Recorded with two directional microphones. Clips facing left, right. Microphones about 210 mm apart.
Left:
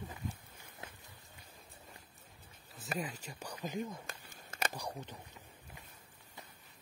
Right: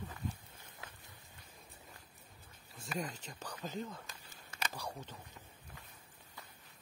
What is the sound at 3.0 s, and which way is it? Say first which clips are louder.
Speech: right 2 dB; 10° left (ahead or behind).